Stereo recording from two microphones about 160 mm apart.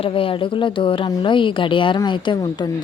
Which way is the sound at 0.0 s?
35° left (ahead or behind).